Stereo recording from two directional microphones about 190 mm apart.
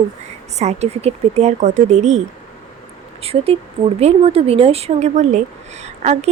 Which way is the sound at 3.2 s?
30° right (ahead or behind).